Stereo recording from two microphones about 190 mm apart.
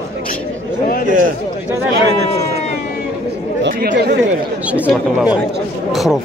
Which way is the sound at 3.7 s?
55° right (ahead or behind).